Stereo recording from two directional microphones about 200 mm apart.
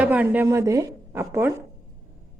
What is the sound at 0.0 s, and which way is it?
A woman's voice, 10° right (ahead or behind).